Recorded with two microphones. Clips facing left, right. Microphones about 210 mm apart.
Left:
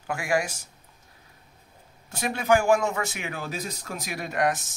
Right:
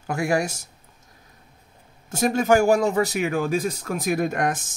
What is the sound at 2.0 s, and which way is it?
A man's voice, 45° right (ahead or behind).